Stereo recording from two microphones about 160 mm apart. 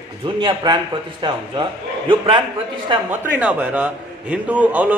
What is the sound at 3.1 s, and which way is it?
A man's voice, 10° right (ahead or behind).